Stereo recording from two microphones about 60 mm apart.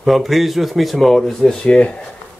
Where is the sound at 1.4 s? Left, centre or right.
Centre.